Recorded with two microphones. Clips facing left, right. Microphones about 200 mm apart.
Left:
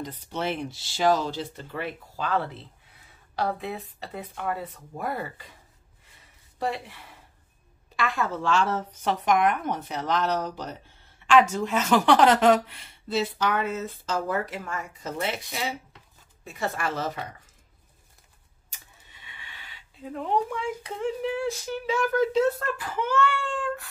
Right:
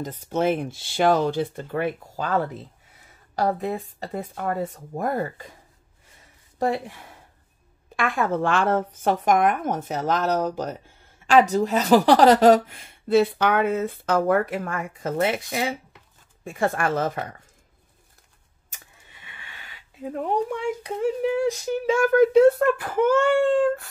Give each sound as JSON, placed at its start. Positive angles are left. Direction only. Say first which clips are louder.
{"t": 0.0, "sound": "speech", "louder": "right 7 dB", "side_deg": -45}
{"t": 6.6, "sound": "speech", "louder": "right 6 dB", "side_deg": -45}
{"t": 18.7, "sound": "speech", "louder": "right 3 dB", "side_deg": -50}